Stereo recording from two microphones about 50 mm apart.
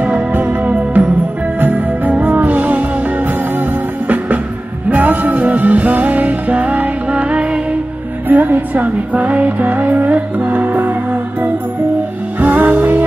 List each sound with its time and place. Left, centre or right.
0.0 s music: right
8.3 s music: right